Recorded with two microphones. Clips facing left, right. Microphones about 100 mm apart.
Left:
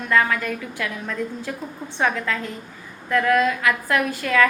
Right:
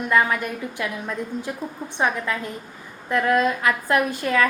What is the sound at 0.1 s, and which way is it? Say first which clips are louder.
A woman's voice: left 1 dB; 20° right (ahead or behind).